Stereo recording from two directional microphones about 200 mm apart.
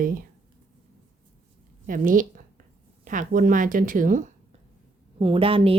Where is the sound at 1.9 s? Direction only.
45° right (ahead or behind).